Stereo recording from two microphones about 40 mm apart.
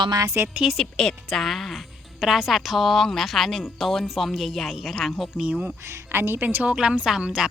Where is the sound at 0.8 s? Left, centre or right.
Centre.